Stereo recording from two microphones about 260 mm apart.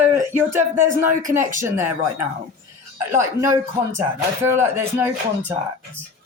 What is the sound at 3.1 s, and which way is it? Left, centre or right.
Speech, centre.